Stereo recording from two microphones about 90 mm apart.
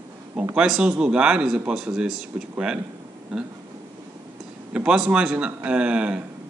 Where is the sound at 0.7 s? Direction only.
10° right (ahead or behind).